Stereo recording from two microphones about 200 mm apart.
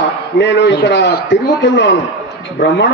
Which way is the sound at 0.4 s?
60° left (ahead or behind).